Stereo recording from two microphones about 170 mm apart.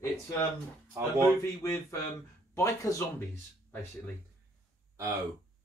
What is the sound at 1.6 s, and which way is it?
Speech, 15° left (ahead or behind).